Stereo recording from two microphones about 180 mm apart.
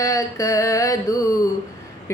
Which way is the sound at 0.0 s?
20° left (ahead or behind).